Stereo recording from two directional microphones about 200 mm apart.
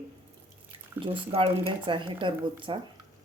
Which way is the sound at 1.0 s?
25° right (ahead or behind).